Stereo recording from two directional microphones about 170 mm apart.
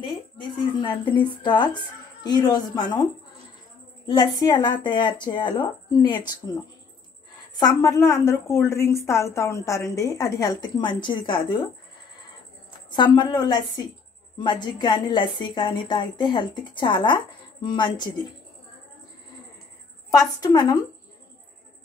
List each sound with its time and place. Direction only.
0.0 s a woman's voice: 30° left (ahead or behind)
7.5 s a woman's voice: 20° left (ahead or behind)
12.9 s a woman's voice: 25° left (ahead or behind)
20.2 s a woman's voice: 20° left (ahead or behind)